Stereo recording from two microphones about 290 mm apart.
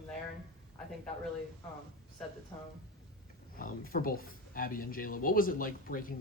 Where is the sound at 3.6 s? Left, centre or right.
Left.